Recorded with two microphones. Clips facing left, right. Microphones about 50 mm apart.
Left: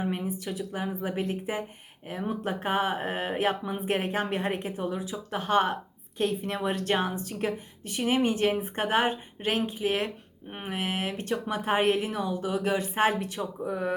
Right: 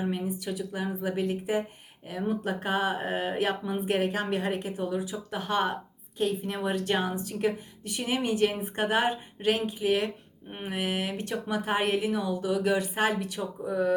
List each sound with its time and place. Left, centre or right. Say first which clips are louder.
0.1 s a woman's voice: even; left